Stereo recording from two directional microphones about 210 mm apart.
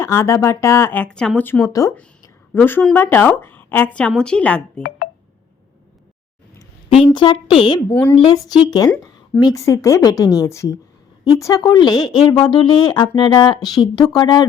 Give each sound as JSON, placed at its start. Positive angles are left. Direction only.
{"t": 0.0, "sound": "speech", "side_deg": 15}
{"t": 7.0, "sound": "speech", "side_deg": 20}